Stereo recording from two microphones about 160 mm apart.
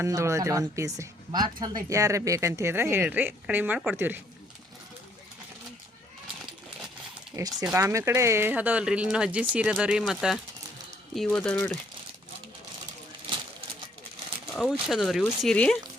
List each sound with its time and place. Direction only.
0.0 s speech: 20° right (ahead or behind)
7.3 s speech: 20° right (ahead or behind); by 11.8 s 10° left (ahead or behind)
14.5 s speech: 5° right (ahead or behind)